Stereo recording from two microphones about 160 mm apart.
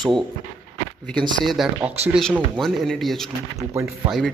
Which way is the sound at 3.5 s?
20° right (ahead or behind).